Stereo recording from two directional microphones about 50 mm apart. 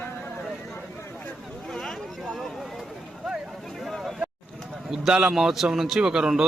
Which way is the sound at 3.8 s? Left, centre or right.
Centre.